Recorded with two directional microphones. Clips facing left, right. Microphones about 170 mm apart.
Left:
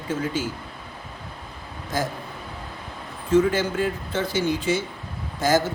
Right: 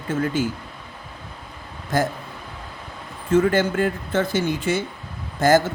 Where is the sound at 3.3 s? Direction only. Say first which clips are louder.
Right 2 dB; 50° right (ahead or behind).